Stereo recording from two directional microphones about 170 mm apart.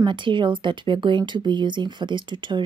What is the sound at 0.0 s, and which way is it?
Speech, 30° right (ahead or behind).